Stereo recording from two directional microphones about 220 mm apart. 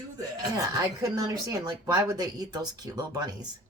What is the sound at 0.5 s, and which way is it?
Speech, 15° right (ahead or behind).